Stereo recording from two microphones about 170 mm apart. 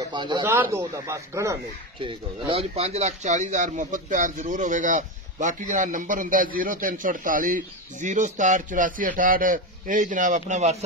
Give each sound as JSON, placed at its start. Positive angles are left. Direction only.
{"t": 0.0, "sound": "speech", "side_deg": -25}
{"t": 0.5, "sound": "speech", "side_deg": -15}
{"t": 2.0, "sound": "speech", "side_deg": -30}